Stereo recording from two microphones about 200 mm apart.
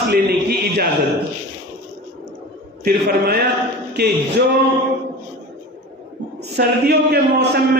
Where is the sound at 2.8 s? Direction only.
50° right (ahead or behind).